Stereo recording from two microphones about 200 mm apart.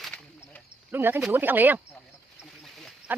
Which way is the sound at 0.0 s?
5° left (ahead or behind).